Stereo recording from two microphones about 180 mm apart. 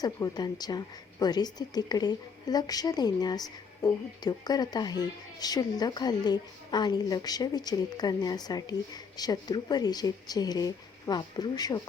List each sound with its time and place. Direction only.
0.0 s a woman's voice: 20° left (ahead or behind)